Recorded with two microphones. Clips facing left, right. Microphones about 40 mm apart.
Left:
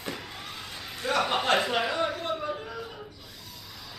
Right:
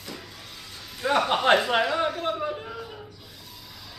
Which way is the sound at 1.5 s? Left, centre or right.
Right.